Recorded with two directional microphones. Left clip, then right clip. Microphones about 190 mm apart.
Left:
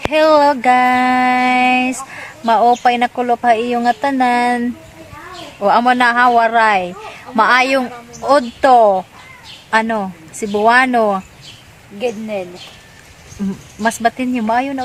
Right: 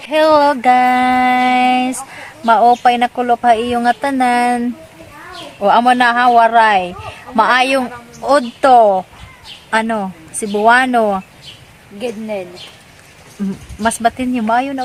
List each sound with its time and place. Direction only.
0.1 s speech: 5° right (ahead or behind)
11.9 s a woman's voice: 10° left (ahead or behind)
13.4 s speech: 5° right (ahead or behind)